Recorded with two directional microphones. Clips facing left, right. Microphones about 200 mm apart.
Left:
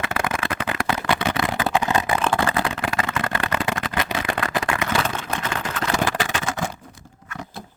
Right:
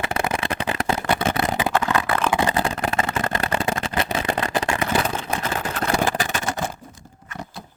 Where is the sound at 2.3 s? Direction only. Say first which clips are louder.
Right 1 dB; 20° right (ahead or behind).